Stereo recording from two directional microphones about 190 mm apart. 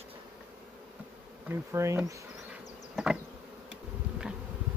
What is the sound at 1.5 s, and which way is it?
Bee, 15° right (ahead or behind).